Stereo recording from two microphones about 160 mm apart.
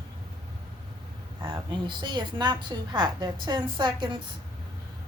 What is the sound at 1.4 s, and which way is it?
A woman's voice, 30° right (ahead or behind).